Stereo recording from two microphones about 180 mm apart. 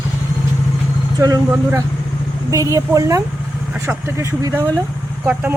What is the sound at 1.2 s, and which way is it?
Speech, 20° right (ahead or behind).